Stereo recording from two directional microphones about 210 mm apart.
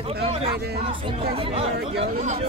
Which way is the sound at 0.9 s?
25° right (ahead or behind).